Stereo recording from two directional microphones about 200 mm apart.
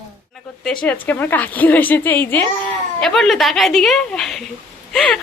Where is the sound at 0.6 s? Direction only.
5° left (ahead or behind).